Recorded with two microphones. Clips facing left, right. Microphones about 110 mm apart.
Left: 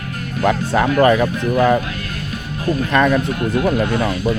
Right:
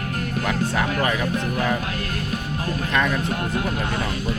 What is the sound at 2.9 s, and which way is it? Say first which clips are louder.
Speech: left 7 dB; 45° left (ahead or behind).